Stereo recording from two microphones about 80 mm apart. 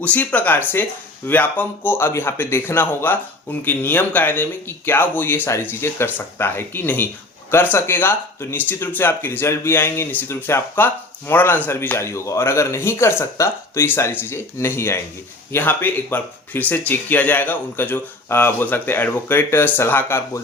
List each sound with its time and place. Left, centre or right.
0.0 s speech: centre
12.0 s speech: left